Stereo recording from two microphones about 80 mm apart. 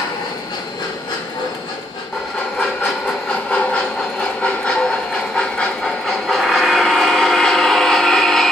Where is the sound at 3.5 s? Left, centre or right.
Centre.